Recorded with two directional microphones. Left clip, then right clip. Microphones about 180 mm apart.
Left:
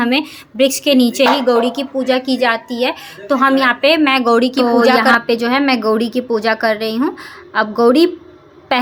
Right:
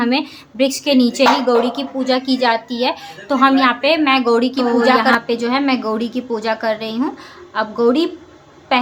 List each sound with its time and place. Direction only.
0.0 s a woman's voice: 15° left (ahead or behind)